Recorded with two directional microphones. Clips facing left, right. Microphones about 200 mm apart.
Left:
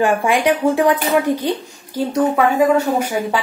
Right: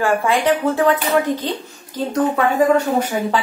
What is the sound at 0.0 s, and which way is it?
Speech, 15° left (ahead or behind).